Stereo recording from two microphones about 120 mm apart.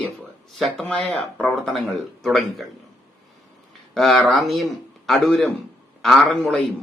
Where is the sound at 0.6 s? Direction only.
Centre (ahead or behind).